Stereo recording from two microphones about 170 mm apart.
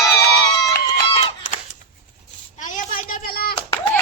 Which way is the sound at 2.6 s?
50° left (ahead or behind).